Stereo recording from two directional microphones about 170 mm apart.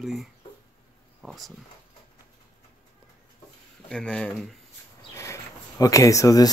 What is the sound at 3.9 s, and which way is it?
Speech, 5° left (ahead or behind).